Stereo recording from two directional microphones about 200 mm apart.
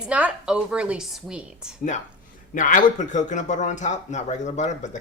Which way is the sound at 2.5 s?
40° left (ahead or behind).